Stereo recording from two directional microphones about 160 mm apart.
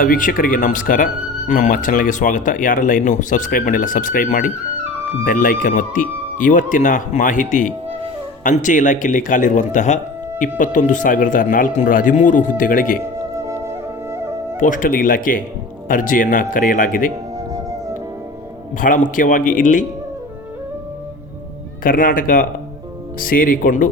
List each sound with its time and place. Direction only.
0.0 s speech: 60° left (ahead or behind)
13.4 s music: 15° right (ahead or behind)
14.6 s speech: 55° left (ahead or behind)
18.8 s speech: 55° left (ahead or behind)
21.8 s speech: 60° left (ahead or behind)